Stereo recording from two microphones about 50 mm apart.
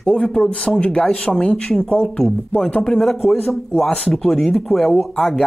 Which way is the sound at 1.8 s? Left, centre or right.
Left.